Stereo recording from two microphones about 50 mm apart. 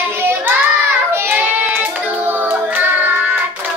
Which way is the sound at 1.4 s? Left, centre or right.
Right.